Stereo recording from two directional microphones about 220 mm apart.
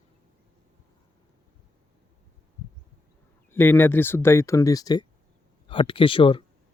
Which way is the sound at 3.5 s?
10° left (ahead or behind).